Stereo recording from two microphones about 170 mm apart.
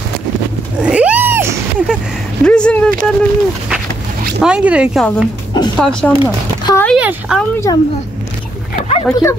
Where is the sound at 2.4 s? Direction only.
5° left (ahead or behind).